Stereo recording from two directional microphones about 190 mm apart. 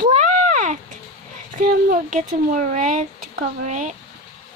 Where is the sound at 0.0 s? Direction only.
40° right (ahead or behind).